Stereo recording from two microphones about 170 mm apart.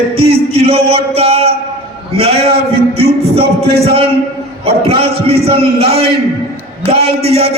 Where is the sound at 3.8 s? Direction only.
35° right (ahead or behind).